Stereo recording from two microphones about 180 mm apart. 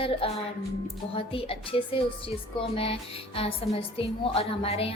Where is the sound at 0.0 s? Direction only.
30° left (ahead or behind).